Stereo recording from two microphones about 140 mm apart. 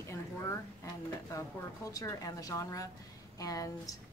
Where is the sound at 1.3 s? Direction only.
25° left (ahead or behind).